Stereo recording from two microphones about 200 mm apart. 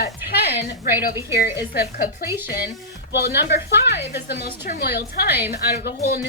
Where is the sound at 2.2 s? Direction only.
10° right (ahead or behind).